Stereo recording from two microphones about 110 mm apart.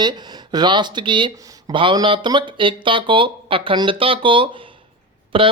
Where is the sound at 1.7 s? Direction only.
50° right (ahead or behind).